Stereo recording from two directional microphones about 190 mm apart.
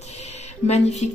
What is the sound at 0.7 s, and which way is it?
Speech, 35° left (ahead or behind).